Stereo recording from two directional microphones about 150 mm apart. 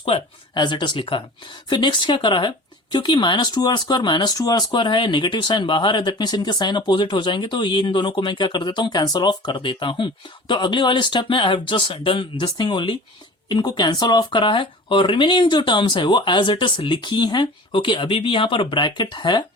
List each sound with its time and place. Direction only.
0.0 s speech: 35° left (ahead or behind)